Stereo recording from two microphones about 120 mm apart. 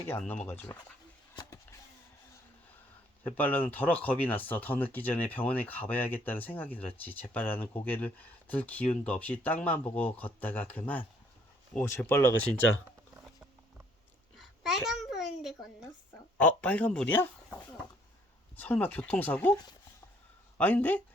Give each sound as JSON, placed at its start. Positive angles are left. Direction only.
{"t": 0.3, "sound": "speech", "side_deg": 15}
{"t": 3.2, "sound": "speech", "side_deg": 15}
{"t": 14.6, "sound": "a sound", "side_deg": 0}
{"t": 16.4, "sound": "speech", "side_deg": 10}
{"t": 20.6, "sound": "speech", "side_deg": 15}